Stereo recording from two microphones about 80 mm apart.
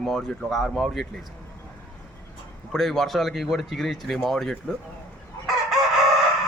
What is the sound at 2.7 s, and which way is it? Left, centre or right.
Speech, centre.